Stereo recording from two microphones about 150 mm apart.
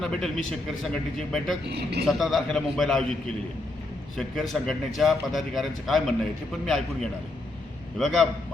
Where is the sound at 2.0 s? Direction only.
Centre (ahead or behind).